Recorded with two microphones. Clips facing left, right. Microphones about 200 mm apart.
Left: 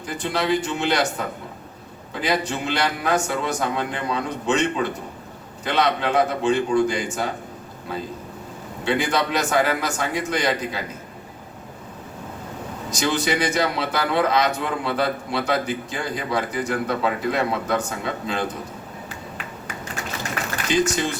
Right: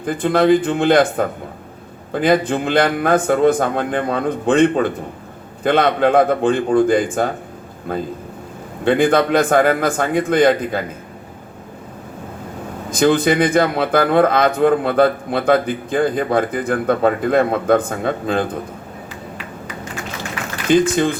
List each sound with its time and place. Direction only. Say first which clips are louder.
0.0 s a man's voice: right 10 dB; 50° right (ahead or behind)
12.9 s a man's voice: right 9 dB; 55° right (ahead or behind)
20.7 s a man's voice: right 8 dB; 55° right (ahead or behind)